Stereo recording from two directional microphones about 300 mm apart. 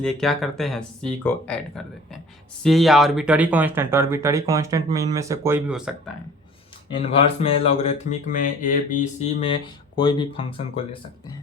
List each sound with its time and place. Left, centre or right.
0.0 s speech: centre
6.9 s speech: centre